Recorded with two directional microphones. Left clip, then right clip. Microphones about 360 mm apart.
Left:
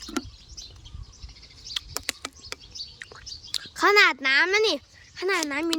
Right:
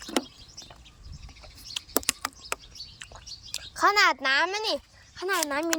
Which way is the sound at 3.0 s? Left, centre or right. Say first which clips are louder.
Left 3 dB; centre.